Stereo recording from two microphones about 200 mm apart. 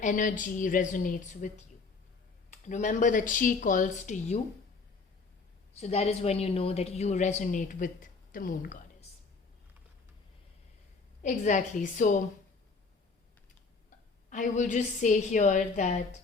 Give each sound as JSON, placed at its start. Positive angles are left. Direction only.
{"t": 0.0, "sound": "a woman's voice", "side_deg": 40}
{"t": 2.5, "sound": "a woman's voice", "side_deg": 35}
{"t": 5.7, "sound": "a woman's voice", "side_deg": 35}
{"t": 11.2, "sound": "a woman's voice", "side_deg": 40}
{"t": 14.3, "sound": "a woman's voice", "side_deg": 40}